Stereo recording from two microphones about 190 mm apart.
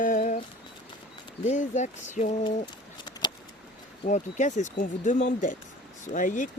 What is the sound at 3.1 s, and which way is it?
Vehicle, 20° left (ahead or behind).